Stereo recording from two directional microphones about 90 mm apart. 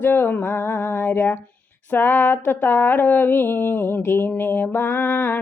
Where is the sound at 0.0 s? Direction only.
20° left (ahead or behind).